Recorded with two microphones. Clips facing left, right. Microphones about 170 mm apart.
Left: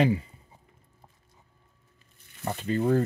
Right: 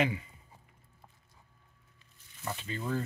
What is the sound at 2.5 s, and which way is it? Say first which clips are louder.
Speech: left 10 dB; 45° left (ahead or behind).